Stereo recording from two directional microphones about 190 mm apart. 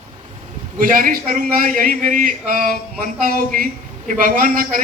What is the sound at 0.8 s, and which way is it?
A man's voice, 45° right (ahead or behind).